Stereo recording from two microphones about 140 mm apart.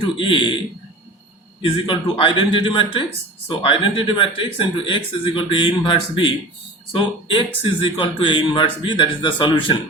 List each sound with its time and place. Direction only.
0.2 s speech: 35° left (ahead or behind)
1.6 s speech: 35° left (ahead or behind)